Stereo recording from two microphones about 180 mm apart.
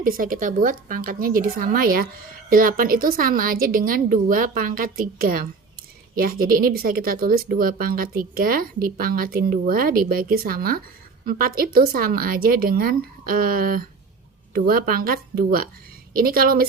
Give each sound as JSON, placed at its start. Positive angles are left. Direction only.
{"t": 0.0, "sound": "a woman's voice", "side_deg": -50}